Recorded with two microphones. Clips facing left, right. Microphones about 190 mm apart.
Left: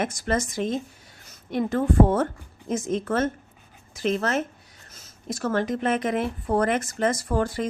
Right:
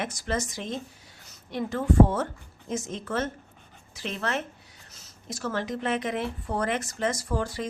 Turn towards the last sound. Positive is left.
turn(degrees=55)  # may be behind; listen again after turning